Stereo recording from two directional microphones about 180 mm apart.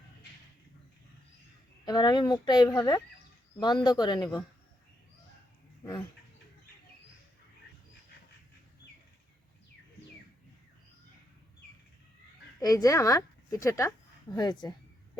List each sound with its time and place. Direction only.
1.8 s speech: 25° left (ahead or behind)
5.8 s speech: 25° left (ahead or behind)
12.5 s speech: 20° left (ahead or behind)